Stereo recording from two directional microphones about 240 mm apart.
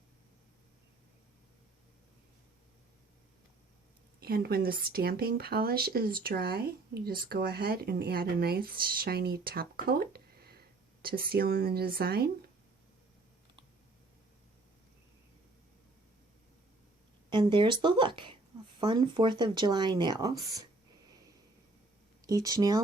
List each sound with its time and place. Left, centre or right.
4.2 s speech: right
17.2 s a woman's voice: centre
22.3 s speech: centre